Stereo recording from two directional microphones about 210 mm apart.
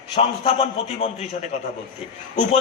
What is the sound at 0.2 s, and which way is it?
A man's voice, 30° left (ahead or behind).